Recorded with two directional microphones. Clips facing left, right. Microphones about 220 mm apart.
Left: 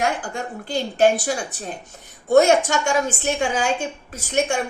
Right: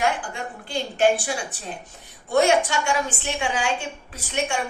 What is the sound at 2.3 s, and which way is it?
A woman's voice, 45° left (ahead or behind).